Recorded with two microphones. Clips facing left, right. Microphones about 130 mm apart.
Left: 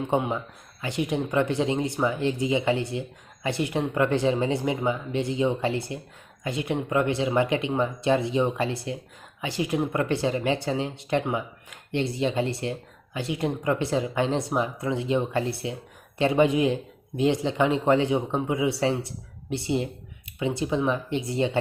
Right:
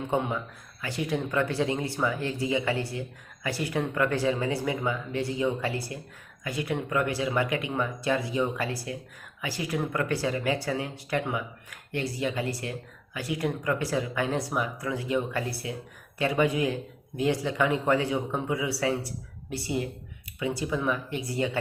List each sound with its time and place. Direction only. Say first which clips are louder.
0.1 s speech: left 1 dB; 20° left (ahead or behind)